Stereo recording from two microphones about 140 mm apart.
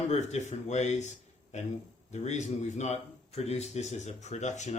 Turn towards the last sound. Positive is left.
turn(degrees=55)  # may be behind; listen again after turning